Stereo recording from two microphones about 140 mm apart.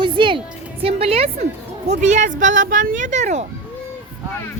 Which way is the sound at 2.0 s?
65° right (ahead or behind).